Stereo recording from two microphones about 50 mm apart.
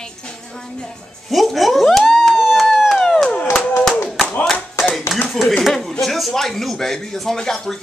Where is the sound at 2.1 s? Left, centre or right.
Centre.